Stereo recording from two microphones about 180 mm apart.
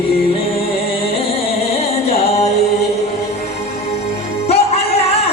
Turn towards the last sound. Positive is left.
turn(degrees=35)  # may be behind; listen again after turning